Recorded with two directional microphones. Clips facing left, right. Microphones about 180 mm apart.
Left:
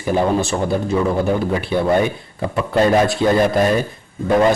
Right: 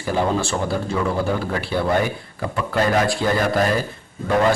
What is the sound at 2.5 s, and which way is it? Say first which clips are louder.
Speech: left 5 dB; 20° left (ahead or behind).